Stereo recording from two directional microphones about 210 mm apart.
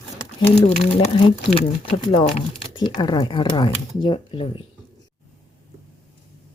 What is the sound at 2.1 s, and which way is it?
Speech, 25° left (ahead or behind).